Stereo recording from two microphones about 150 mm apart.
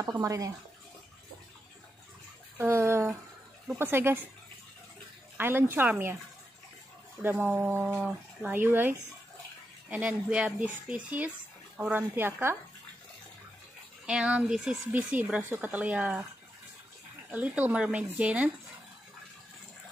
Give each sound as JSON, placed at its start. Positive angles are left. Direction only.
{"t": 0.0, "sound": "speech", "side_deg": -20}
{"t": 2.5, "sound": "speech", "side_deg": -15}
{"t": 5.4, "sound": "speech", "side_deg": -15}
{"t": 7.2, "sound": "speech", "side_deg": -10}
{"t": 14.0, "sound": "speech", "side_deg": -5}
{"t": 17.3, "sound": "speech", "side_deg": -10}